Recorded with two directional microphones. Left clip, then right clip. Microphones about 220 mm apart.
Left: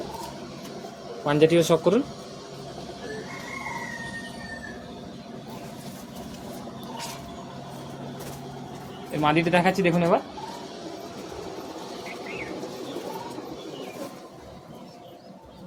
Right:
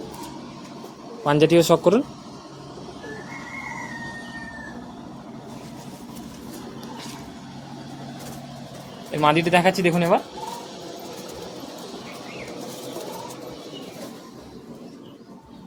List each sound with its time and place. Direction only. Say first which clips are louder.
1.2 s speech: right 3 dB; 30° right (ahead or behind)
9.1 s speech: right 4 dB; 40° right (ahead or behind)